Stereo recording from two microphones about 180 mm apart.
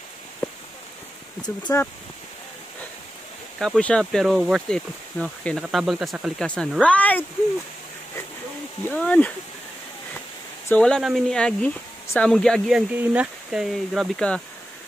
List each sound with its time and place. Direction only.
1.7 s speech: 20° left (ahead or behind)
3.5 s speech: centre (ahead or behind)
8.8 s speech: 10° left (ahead or behind)
10.7 s speech: 5° left (ahead or behind)